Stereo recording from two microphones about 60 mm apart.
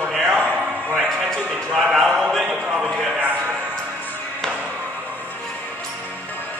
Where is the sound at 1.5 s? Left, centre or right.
Centre.